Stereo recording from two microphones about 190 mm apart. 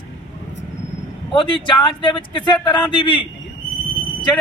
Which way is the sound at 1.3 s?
25° left (ahead or behind).